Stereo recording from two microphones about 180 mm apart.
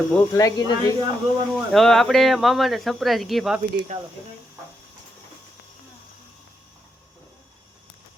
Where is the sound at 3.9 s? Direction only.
45° right (ahead or behind).